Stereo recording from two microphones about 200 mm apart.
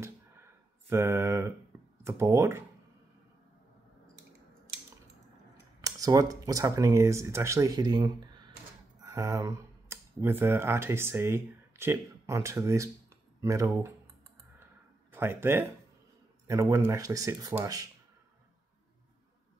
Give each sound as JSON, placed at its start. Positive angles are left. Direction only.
{"t": 0.0, "sound": "a sound", "side_deg": -10}
{"t": 2.0, "sound": "speech", "side_deg": -15}
{"t": 5.8, "sound": "speech", "side_deg": -15}
{"t": 15.0, "sound": "speech", "side_deg": -10}